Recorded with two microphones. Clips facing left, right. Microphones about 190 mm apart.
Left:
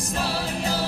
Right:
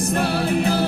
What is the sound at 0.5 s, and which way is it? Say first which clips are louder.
Music: right 8 dB; 60° right (ahead or behind).